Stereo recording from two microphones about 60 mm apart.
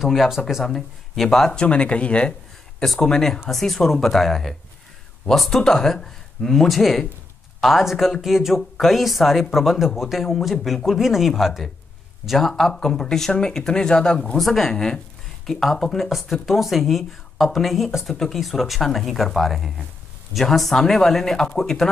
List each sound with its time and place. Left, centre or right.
0.0 s speech: centre
2.8 s speech: centre